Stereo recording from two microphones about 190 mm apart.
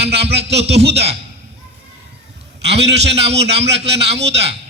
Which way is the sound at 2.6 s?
65° right (ahead or behind).